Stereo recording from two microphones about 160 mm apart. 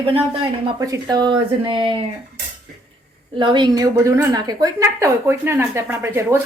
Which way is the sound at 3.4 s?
30° right (ahead or behind).